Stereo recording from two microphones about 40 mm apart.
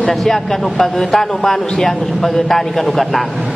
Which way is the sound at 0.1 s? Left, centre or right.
Centre.